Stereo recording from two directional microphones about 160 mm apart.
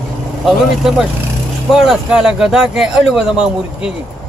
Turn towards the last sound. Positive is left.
turn(degrees=-5)  # may be behind; listen again after turning